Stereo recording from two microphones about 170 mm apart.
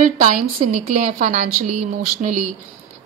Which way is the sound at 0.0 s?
45° right (ahead or behind).